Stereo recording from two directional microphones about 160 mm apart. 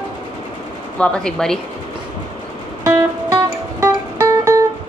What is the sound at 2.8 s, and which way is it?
Music, 20° right (ahead or behind).